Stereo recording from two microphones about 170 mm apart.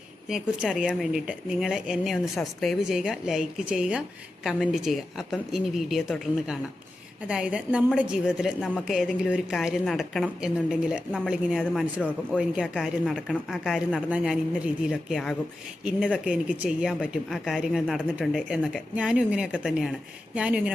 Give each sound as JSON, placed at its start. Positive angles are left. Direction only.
{"t": 0.3, "sound": "a woman's voice", "side_deg": -5}